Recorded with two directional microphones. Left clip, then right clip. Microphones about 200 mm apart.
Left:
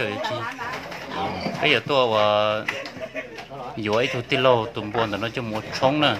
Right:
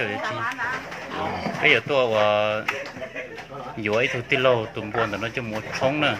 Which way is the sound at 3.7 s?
15° left (ahead or behind).